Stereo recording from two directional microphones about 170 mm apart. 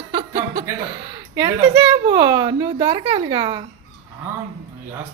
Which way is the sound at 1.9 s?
25° right (ahead or behind).